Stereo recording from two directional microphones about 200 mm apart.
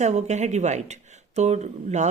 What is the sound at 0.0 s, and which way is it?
Speech, 35° right (ahead or behind).